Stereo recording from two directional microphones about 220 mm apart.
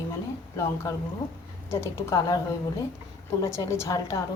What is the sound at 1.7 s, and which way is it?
Speech, 10° left (ahead or behind).